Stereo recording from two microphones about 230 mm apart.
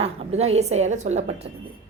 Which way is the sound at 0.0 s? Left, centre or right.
Right.